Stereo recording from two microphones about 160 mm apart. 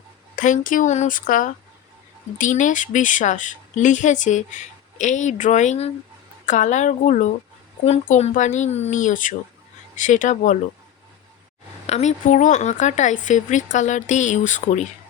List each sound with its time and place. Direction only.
0.3 s a woman's voice: 55° left (ahead or behind)
11.9 s a woman's voice: 45° left (ahead or behind)